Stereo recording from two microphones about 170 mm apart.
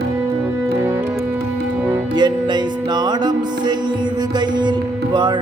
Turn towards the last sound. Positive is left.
turn(degrees=-25)  # may be behind; listen again after turning